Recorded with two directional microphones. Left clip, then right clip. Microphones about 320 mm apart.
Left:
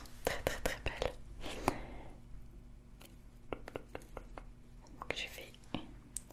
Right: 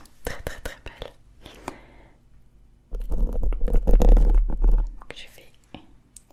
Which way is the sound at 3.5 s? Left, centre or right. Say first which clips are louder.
Right 6 dB; centre.